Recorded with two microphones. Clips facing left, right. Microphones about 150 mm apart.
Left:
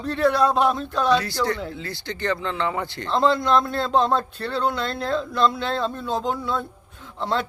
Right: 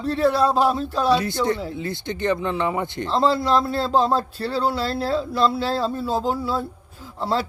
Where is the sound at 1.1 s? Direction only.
25° right (ahead or behind).